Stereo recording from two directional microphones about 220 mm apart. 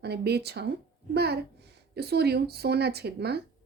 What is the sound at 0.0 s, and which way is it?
A woman's voice, 50° right (ahead or behind).